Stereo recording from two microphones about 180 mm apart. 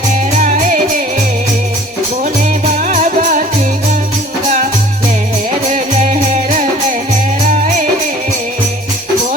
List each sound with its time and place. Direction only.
0.4 s music: 40° right (ahead or behind)
2.7 s music: 40° right (ahead or behind)
5.6 s music: 40° right (ahead or behind)